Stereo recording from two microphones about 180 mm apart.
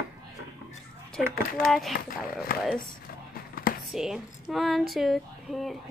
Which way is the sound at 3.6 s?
55° left (ahead or behind).